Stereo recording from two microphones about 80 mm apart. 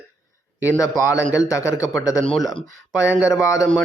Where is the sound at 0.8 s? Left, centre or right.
Left.